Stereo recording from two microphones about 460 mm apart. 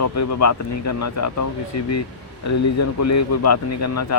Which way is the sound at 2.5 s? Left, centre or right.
Left.